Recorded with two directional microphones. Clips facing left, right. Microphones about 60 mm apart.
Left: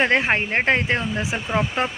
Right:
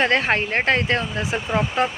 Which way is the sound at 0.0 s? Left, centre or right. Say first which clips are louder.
Even; centre.